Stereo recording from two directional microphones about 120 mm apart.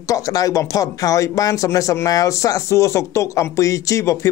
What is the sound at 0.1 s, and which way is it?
Speech, 30° left (ahead or behind).